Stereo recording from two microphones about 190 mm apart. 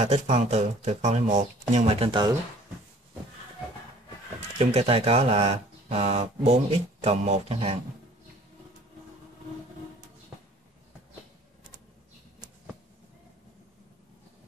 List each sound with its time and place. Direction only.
0.0 s speech: 35° right (ahead or behind)
4.6 s speech: 30° right (ahead or behind)